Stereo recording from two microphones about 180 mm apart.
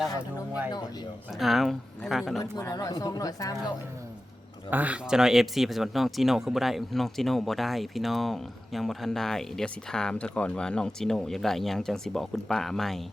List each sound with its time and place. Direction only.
1.4 s speech: centre (ahead or behind)
2.4 s speech: 20° left (ahead or behind)
4.7 s speech: 10° right (ahead or behind)